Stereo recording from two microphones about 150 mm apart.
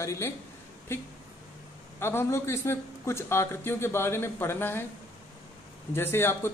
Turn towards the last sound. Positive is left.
turn(degrees=15)  # may be behind; listen again after turning